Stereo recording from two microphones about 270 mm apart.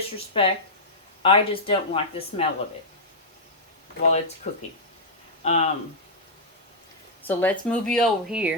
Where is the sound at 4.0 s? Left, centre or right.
Left.